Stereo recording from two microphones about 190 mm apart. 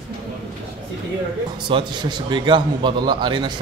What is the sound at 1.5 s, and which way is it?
A man's voice, 25° right (ahead or behind).